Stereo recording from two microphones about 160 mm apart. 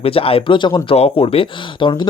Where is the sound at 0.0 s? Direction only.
35° left (ahead or behind).